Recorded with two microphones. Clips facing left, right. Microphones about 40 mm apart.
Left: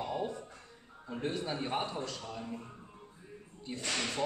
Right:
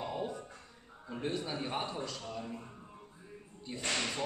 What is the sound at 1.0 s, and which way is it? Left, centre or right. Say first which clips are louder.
Speech: left 1 dB; centre.